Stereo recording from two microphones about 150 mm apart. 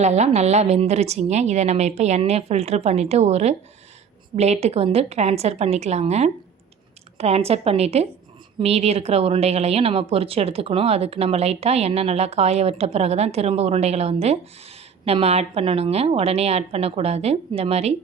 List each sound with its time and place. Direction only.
0.0 s speech: 50° right (ahead or behind)